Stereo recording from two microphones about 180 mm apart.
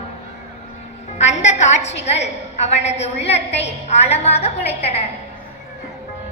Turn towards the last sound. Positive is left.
turn(degrees=35)  # may be behind; listen again after turning